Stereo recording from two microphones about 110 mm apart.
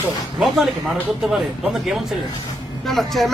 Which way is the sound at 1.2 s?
5° right (ahead or behind).